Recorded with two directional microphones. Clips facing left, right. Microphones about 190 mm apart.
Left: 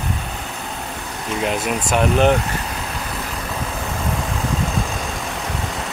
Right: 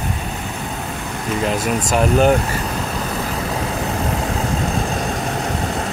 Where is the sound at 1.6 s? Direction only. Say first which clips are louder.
Right 2 dB; 45° right (ahead or behind).